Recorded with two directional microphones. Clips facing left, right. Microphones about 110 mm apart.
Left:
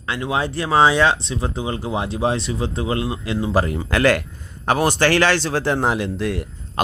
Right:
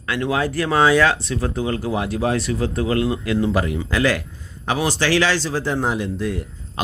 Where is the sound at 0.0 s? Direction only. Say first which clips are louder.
Right 1 dB; 25° left (ahead or behind).